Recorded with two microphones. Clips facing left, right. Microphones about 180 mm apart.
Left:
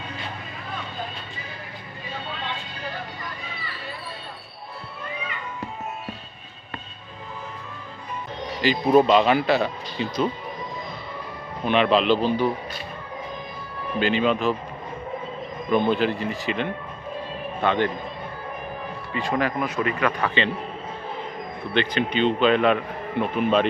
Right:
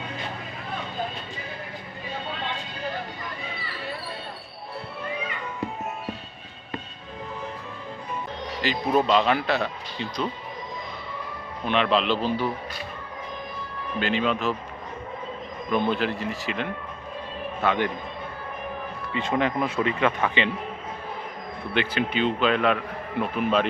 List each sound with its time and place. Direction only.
8.6 s a man's voice: centre (ahead or behind)
11.6 s a man's voice: centre (ahead or behind)
14.0 s a man's voice: centre (ahead or behind)
15.7 s a man's voice: centre (ahead or behind)
19.1 s speech: 20° right (ahead or behind)
21.8 s a man's voice: 5° right (ahead or behind)